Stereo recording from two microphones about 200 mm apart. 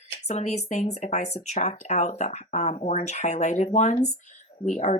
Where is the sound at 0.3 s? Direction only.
35° left (ahead or behind).